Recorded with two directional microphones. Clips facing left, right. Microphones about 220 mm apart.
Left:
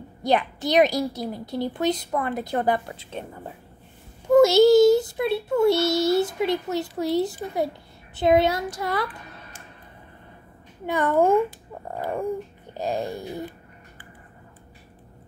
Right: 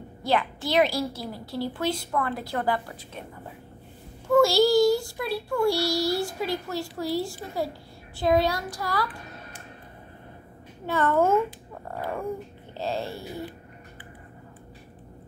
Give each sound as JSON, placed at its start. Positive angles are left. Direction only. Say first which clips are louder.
{"t": 0.2, "sound": "a child's voice", "louder": "left 3 dB", "side_deg": 20}
{"t": 4.3, "sound": "a child's voice", "louder": "left 5 dB", "side_deg": 20}
{"t": 10.9, "sound": "speech", "louder": "left 2 dB", "side_deg": 15}